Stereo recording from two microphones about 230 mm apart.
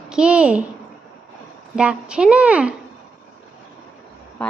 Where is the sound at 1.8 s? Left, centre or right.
Centre.